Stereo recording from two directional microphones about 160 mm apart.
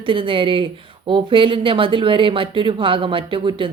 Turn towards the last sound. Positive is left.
turn(degrees=-35)  # may be behind; listen again after turning